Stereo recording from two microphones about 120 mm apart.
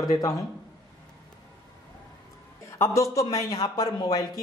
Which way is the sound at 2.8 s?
25° left (ahead or behind).